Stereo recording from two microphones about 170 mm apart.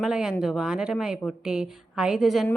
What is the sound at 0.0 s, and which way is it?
Speech, 5° right (ahead or behind).